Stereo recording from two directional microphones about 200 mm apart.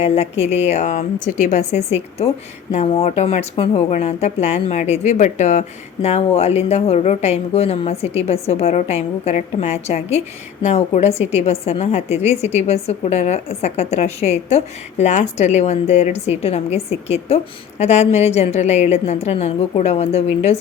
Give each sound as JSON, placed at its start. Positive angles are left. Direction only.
{"t": 0.0, "sound": "speech", "side_deg": 30}